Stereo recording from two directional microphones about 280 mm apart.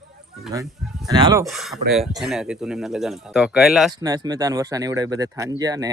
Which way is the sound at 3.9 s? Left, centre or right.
Centre.